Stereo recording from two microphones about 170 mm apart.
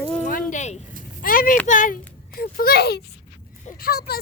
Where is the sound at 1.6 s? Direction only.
50° left (ahead or behind).